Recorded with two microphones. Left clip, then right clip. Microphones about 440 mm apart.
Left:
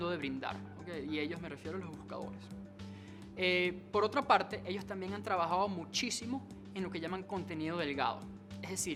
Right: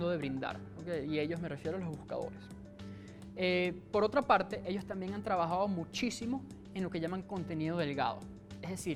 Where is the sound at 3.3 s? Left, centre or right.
Right.